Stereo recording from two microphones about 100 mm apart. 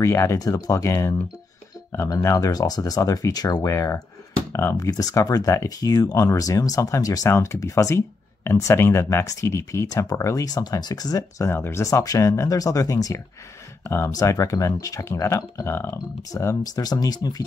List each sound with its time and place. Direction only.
0.0 s speech: 30° left (ahead or behind)
7.3 s speech: 25° left (ahead or behind); by 17.5 s 40° left (ahead or behind)